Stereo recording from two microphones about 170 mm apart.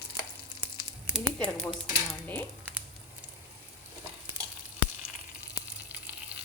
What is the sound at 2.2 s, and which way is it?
Speech, 10° left (ahead or behind).